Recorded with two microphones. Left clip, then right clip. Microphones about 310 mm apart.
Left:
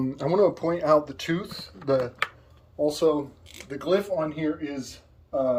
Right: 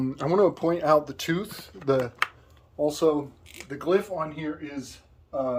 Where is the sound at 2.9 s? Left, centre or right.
Right.